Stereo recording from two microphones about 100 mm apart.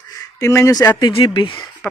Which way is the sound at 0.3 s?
30° left (ahead or behind).